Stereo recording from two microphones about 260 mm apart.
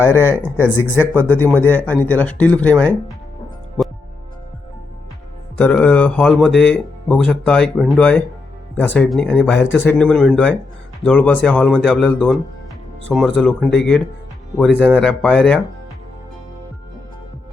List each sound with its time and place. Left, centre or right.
0.0 s speech: centre
5.5 s speech: centre